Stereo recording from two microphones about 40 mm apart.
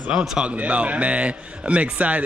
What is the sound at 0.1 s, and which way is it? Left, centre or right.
Speech, centre.